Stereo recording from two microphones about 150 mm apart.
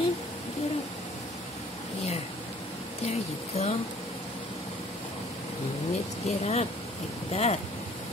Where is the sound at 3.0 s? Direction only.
45° left (ahead or behind).